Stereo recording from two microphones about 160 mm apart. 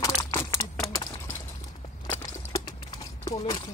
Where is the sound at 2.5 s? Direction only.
25° left (ahead or behind).